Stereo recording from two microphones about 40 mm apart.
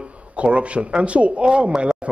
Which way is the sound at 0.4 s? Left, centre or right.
Right.